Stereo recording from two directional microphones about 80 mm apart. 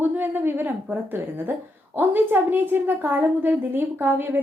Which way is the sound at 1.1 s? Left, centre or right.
Right.